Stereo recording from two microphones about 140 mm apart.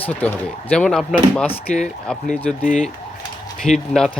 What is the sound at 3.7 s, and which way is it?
Speech, 55° left (ahead or behind).